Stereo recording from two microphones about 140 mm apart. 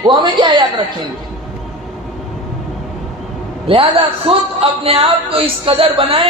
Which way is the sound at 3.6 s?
40° right (ahead or behind).